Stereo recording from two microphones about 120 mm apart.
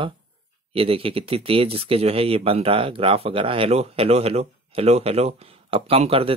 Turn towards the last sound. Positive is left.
turn(degrees=-55)  # may be behind; listen again after turning